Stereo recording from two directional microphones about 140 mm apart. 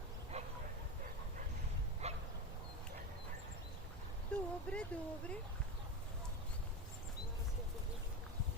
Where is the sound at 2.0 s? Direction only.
50° right (ahead or behind).